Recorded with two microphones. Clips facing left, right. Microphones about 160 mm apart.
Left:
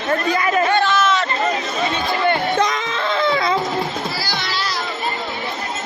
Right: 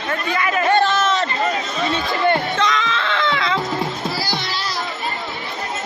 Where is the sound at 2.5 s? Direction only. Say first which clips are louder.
Left 1 dB; 40° left (ahead or behind).